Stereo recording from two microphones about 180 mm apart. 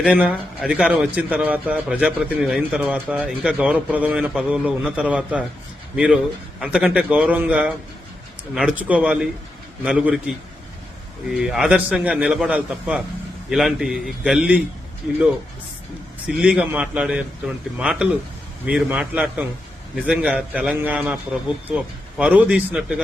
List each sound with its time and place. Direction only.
0.0 s a man's voice: 10° right (ahead or behind)
6.6 s a man's voice: 5° right (ahead or behind)
16.3 s a man's voice: 5° right (ahead or behind)